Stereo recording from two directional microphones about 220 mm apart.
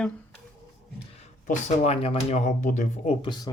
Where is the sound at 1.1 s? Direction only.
30° left (ahead or behind).